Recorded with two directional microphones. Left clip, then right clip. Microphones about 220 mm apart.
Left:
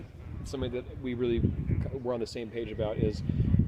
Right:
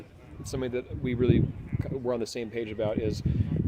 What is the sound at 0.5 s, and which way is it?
Speech, 30° right (ahead or behind).